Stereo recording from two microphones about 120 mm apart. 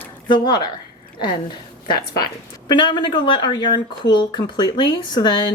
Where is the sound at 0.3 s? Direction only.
40° left (ahead or behind).